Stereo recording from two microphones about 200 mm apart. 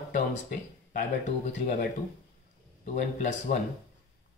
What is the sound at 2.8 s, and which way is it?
Speech, 40° left (ahead or behind).